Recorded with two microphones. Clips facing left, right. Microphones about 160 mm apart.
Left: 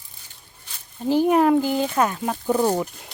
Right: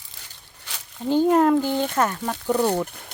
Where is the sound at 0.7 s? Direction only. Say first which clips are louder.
Right 7 dB; 90° right.